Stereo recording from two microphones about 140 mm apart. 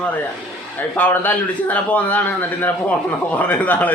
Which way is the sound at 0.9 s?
10° left (ahead or behind).